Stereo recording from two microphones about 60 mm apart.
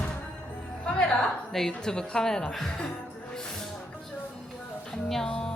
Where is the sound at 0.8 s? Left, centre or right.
Centre.